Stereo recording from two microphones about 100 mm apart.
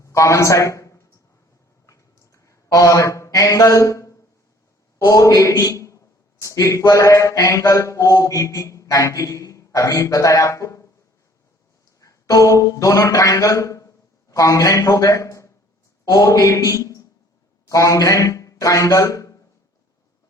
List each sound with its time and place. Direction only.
0.0 s a man's voice: 30° left (ahead or behind)
1.9 s a sound: 35° left (ahead or behind)
4.9 s a man's voice: 35° left (ahead or behind)
11.9 s a man's voice: 35° left (ahead or behind)